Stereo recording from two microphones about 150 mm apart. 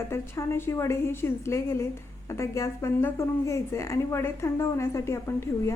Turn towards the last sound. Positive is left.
turn(degrees=15)  # may be behind; listen again after turning